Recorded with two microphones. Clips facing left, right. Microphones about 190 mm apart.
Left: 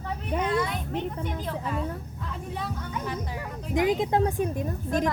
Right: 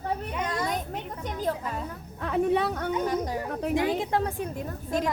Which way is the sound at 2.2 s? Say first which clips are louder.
Right 13 dB; 70° right (ahead or behind).